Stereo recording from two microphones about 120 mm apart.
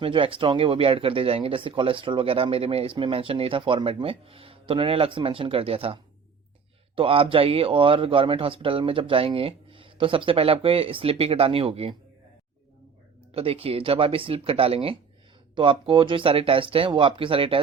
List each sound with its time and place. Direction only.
0.0 s speech: 50° right (ahead or behind)
13.3 s speech: 50° right (ahead or behind)